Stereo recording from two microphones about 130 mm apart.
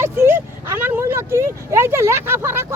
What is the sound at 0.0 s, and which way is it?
Speech, 20° right (ahead or behind).